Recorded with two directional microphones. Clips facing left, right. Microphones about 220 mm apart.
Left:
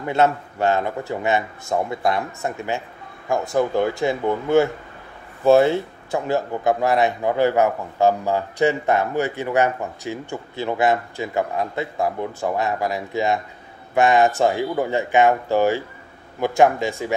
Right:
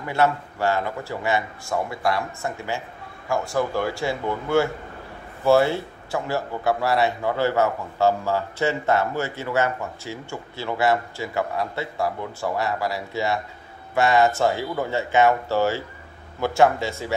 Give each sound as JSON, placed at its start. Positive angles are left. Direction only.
{"t": 0.0, "sound": "a man's voice", "side_deg": 20}